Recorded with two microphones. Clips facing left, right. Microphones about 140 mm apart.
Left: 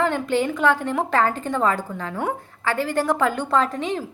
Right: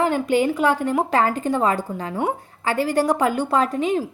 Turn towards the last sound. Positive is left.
turn(degrees=-10)  # may be behind; listen again after turning